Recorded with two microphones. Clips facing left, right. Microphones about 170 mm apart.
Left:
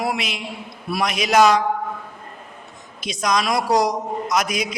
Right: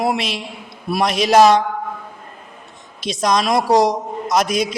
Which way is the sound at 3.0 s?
25° right (ahead or behind).